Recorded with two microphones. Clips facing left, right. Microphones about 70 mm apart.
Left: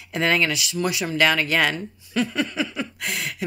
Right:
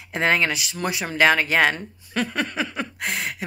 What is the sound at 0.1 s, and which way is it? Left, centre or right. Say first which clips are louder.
Speech: even; right.